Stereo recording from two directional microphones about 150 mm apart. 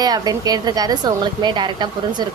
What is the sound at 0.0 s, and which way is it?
A woman's voice, 25° right (ahead or behind).